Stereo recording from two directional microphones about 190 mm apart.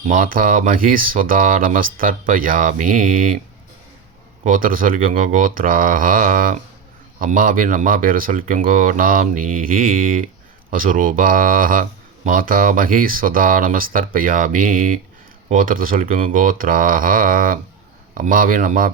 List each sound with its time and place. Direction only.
0.1 s speech: 45° right (ahead or behind)
4.4 s speech: 45° right (ahead or behind)